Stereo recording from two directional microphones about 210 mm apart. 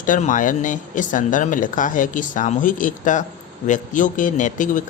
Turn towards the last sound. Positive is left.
turn(degrees=35)  # may be behind; listen again after turning